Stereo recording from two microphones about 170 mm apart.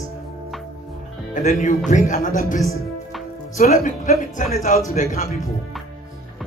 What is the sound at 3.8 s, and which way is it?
Speech, 50° left (ahead or behind).